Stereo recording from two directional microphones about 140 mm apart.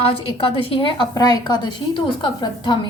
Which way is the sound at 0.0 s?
40° left (ahead or behind).